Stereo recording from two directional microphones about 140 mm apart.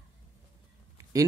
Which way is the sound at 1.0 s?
25° right (ahead or behind).